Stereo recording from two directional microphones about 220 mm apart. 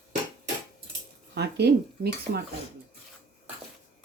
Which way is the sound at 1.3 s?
50° right (ahead or behind).